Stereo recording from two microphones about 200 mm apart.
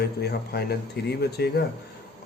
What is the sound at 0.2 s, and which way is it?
Speech, 55° left (ahead or behind).